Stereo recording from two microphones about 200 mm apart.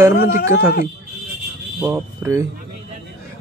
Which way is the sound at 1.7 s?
10° right (ahead or behind).